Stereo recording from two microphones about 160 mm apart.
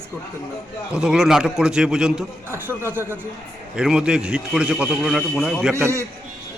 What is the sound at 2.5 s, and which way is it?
A man's voice, 15° right (ahead or behind).